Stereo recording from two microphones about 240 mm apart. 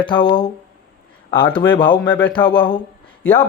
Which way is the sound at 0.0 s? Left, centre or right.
Centre.